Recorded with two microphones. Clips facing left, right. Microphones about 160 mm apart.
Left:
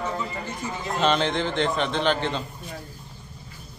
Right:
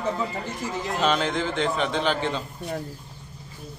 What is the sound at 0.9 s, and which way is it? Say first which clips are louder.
A man's voice: left 2 dB; 5° right (ahead or behind).